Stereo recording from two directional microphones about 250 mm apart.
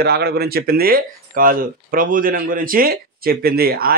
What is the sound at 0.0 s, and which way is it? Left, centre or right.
Speech, right.